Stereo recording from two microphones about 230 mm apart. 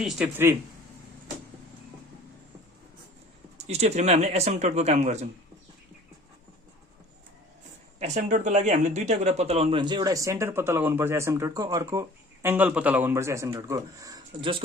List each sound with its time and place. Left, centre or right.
0.0 s speech: centre
3.6 s speech: right
7.9 s speech: right